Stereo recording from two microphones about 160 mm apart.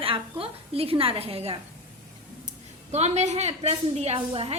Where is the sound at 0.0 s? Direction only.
35° right (ahead or behind).